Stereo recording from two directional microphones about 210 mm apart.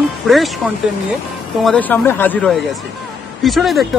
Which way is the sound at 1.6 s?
10° left (ahead or behind).